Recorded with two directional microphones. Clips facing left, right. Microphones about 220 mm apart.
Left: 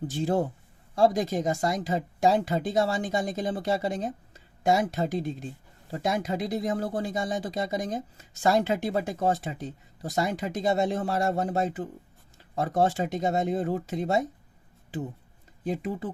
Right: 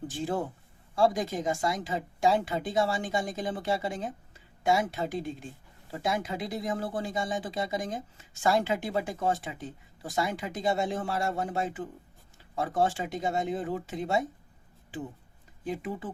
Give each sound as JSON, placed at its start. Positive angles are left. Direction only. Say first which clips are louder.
{"t": 0.1, "sound": "speech", "louder": "left 6 dB", "side_deg": 40}
{"t": 15.6, "sound": "speech", "louder": "left 4 dB", "side_deg": 40}